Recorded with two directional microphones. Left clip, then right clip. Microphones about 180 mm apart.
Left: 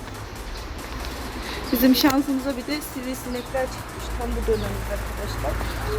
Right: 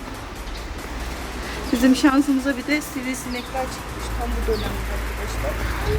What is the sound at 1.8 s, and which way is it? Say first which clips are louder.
Speech: right 2 dB; 10° left (ahead or behind).